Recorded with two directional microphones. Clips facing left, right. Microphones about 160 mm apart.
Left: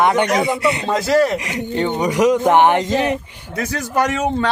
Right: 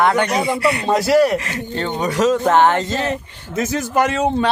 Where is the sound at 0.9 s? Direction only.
10° right (ahead or behind).